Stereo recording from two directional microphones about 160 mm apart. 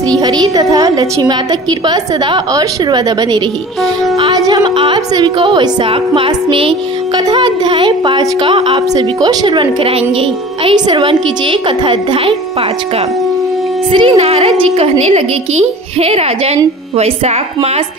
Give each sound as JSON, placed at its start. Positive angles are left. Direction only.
{"t": 0.2, "sound": "a woman's voice", "side_deg": -25}
{"t": 13.9, "sound": "a woman's voice", "side_deg": -35}